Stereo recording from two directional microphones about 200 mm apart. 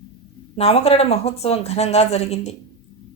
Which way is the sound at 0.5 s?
30° left (ahead or behind).